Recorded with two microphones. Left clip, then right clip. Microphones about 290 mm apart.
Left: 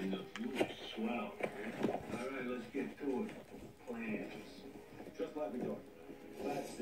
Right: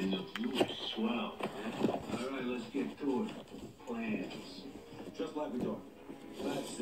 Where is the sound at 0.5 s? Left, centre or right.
Right.